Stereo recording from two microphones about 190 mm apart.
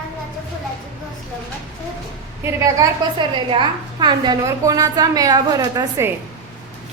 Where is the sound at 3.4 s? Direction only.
25° right (ahead or behind).